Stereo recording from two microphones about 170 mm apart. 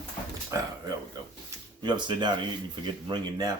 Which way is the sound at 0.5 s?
20° right (ahead or behind).